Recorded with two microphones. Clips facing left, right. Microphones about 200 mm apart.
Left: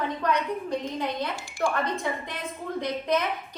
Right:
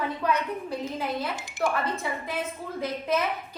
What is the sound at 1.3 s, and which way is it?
Speech, 20° right (ahead or behind).